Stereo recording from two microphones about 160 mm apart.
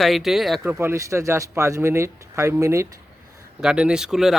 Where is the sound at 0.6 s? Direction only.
15° right (ahead or behind).